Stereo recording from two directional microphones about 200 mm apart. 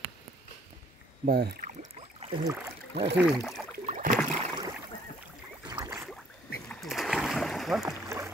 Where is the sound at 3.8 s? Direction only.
40° right (ahead or behind).